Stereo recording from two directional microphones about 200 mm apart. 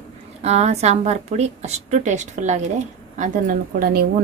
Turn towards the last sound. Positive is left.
turn(degrees=-45)  # may be behind; listen again after turning